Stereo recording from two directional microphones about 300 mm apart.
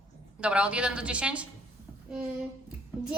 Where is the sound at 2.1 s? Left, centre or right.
Centre.